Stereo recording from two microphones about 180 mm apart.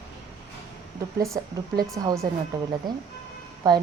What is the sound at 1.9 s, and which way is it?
Speech, 15° right (ahead or behind).